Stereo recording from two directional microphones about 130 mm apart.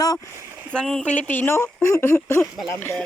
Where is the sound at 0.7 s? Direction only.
5° left (ahead or behind).